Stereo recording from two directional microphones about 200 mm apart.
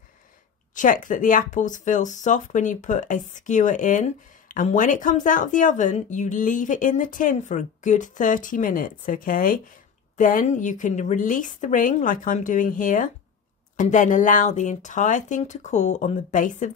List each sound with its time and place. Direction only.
0.7 s speech: 40° left (ahead or behind)